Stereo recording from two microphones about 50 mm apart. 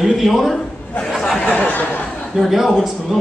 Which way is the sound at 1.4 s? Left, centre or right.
Left.